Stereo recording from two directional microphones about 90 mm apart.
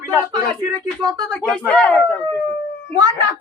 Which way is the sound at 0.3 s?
50° right (ahead or behind).